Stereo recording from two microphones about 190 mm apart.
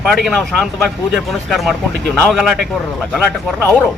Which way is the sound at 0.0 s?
Centre (ahead or behind).